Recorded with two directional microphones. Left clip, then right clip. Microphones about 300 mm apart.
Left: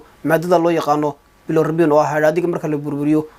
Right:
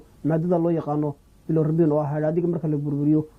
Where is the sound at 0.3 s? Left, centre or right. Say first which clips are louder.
Left 8 dB; centre.